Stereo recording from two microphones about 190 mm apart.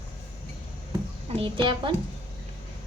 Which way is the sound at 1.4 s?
25° right (ahead or behind).